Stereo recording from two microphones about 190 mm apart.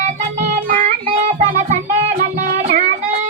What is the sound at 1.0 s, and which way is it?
Music, 35° right (ahead or behind).